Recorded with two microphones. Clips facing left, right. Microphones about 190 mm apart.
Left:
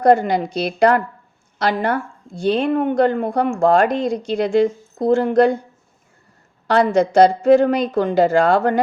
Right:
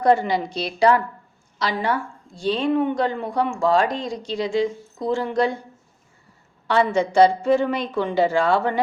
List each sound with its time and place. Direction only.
0.0 s a woman's voice: 50° left (ahead or behind)
6.7 s a woman's voice: 40° left (ahead or behind)